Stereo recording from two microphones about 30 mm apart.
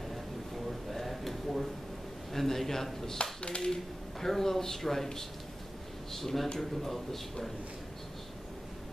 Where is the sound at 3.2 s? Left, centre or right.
Left.